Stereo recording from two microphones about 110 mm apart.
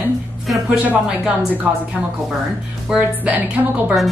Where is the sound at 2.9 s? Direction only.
15° right (ahead or behind).